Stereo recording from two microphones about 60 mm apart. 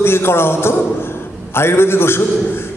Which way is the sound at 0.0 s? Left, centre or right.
Left.